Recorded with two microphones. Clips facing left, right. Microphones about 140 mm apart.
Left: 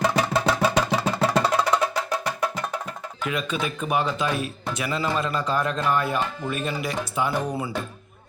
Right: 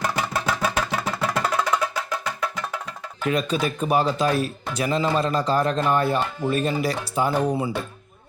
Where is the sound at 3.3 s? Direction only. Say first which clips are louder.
Right 4 dB; 40° right (ahead or behind).